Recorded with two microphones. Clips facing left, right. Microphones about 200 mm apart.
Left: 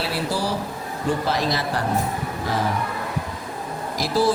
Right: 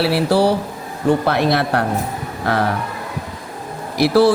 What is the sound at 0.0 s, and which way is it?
A man's voice, 65° right (ahead or behind).